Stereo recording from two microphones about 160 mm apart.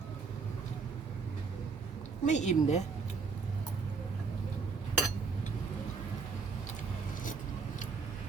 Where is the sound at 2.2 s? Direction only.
45° left (ahead or behind).